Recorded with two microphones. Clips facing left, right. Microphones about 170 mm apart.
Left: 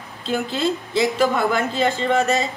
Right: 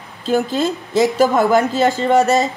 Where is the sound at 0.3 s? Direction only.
40° right (ahead or behind).